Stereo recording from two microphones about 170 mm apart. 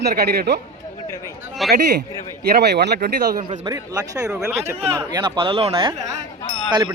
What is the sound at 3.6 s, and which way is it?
Speech, 20° right (ahead or behind).